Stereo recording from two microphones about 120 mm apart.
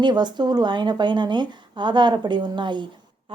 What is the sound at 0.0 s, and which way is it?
A woman's voice, 40° right (ahead or behind).